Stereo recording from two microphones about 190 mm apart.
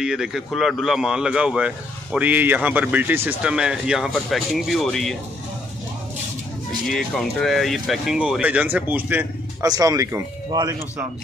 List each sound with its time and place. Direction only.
0.0 s speech: 5° right (ahead or behind)
6.9 s speech: centre (ahead or behind); by 10.8 s 20° right (ahead or behind)